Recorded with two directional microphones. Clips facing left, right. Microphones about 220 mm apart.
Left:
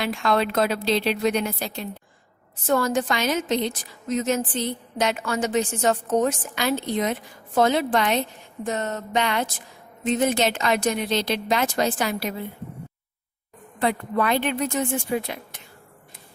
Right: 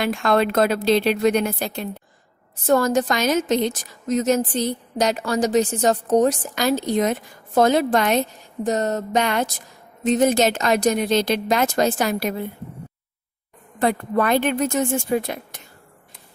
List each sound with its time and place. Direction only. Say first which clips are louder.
0.0 s speech: right 4 dB; 50° right (ahead or behind)
2.6 s a woman's voice: right 4 dB; 40° right (ahead or behind)
13.7 s speech: right 3 dB; 45° right (ahead or behind)